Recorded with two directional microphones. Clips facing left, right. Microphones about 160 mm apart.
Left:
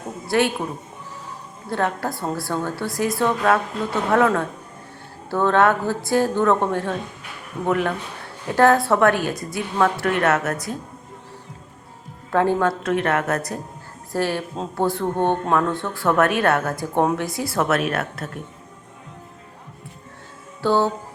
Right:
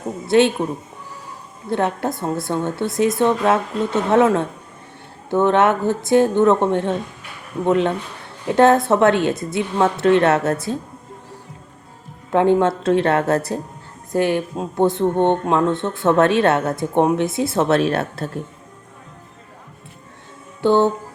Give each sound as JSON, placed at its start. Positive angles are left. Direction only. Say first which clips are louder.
{"t": 0.3, "sound": "a woman's voice", "louder": "right 5 dB", "side_deg": -25}
{"t": 1.7, "sound": "a woman's voice", "louder": "right 3 dB", "side_deg": -20}
{"t": 12.3, "sound": "a woman's voice", "louder": "right 4 dB", "side_deg": -20}
{"t": 14.1, "sound": "a woman's voice", "louder": "right 5 dB", "side_deg": -20}
{"t": 20.6, "sound": "music", "louder": "right 4 dB", "side_deg": -20}